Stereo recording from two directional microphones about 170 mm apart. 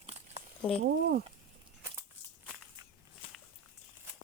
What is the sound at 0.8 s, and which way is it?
Speech, 65° right (ahead or behind).